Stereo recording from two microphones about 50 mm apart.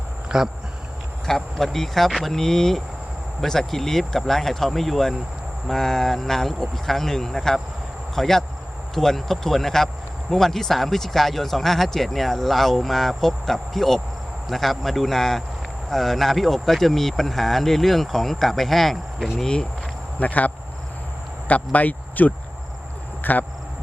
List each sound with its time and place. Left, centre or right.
0.3 s speech: centre
1.5 s speech: centre
20.1 s speech: left